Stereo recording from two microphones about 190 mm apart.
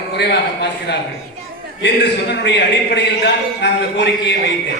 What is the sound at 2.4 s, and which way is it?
A man's voice, 65° left (ahead or behind).